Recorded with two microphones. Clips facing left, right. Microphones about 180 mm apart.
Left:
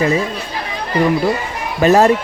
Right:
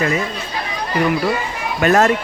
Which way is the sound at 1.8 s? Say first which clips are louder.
Left 3 dB; 30° left (ahead or behind).